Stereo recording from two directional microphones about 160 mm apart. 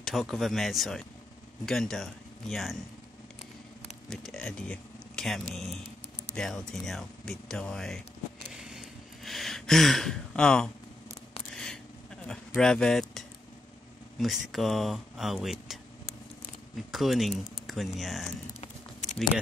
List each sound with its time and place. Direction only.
0.0 s speech: centre (ahead or behind)
4.1 s speech: centre (ahead or behind)
8.5 s a sound: centre (ahead or behind)
12.3 s speech: 5° left (ahead or behind)
16.9 s speech: centre (ahead or behind)